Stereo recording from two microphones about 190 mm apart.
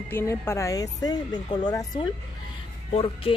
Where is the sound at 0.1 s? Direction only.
15° left (ahead or behind).